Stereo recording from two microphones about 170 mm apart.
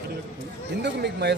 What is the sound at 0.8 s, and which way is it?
Speech, 85° right.